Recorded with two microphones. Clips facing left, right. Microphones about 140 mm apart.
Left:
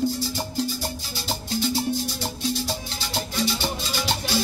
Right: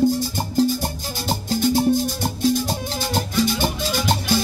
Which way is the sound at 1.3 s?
50° right (ahead or behind).